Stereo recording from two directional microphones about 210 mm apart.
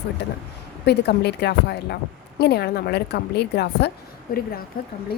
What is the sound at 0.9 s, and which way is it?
A woman's voice, 50° left (ahead or behind).